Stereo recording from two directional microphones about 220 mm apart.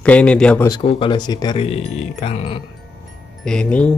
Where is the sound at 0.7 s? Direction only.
25° left (ahead or behind).